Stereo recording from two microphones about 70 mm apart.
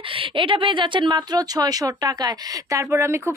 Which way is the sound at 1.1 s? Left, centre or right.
Right.